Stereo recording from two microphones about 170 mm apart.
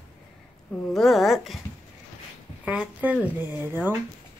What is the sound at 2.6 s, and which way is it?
Speech, 5° right (ahead or behind).